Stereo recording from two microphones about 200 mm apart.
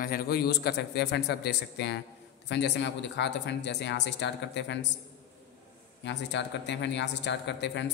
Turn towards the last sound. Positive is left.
turn(degrees=60)  # may be behind; listen again after turning